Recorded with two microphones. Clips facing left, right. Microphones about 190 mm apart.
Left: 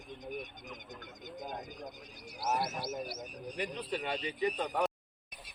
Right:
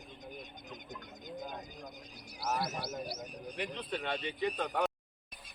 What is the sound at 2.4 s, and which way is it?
Speech, 25° left (ahead or behind).